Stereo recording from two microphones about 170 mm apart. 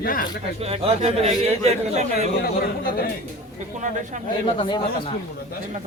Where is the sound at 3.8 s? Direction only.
45° right (ahead or behind).